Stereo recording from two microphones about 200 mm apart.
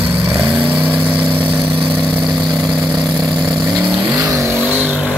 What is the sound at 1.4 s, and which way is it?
Vehicle, 25° right (ahead or behind).